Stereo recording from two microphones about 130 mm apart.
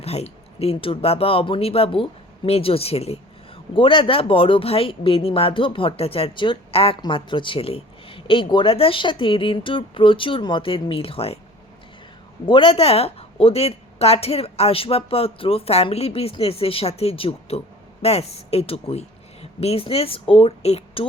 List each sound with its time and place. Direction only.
0.0 s speech: 50° left (ahead or behind)
12.5 s speech: 40° left (ahead or behind)